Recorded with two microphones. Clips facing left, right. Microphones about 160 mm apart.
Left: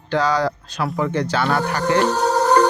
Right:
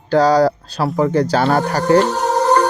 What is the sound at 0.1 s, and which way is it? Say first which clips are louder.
Speech: right 7 dB; 35° right (ahead or behind).